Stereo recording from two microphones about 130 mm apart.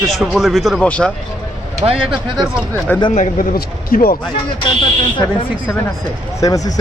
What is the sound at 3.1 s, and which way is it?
Speech, 70° left (ahead or behind).